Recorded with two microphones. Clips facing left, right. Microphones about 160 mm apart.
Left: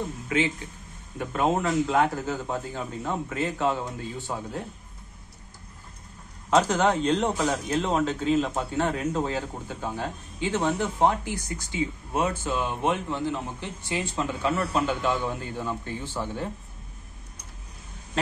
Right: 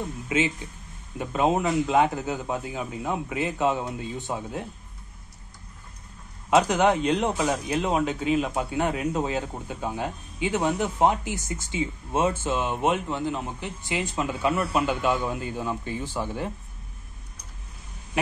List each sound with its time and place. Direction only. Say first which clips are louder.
0.3 s a man's voice: right 1 dB; 20° right (ahead or behind)
6.5 s a man's voice: right 1 dB; 10° right (ahead or behind)